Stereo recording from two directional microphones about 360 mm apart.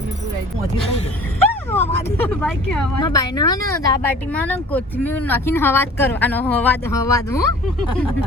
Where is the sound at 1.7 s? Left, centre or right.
Centre.